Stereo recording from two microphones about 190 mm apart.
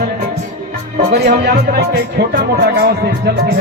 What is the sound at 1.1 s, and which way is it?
Speech, 60° right (ahead or behind).